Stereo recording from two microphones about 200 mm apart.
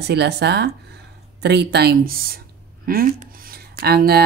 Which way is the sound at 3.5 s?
50° right (ahead or behind).